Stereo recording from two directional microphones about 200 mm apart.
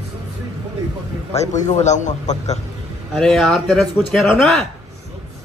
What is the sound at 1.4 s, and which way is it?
A man's voice, 35° left (ahead or behind).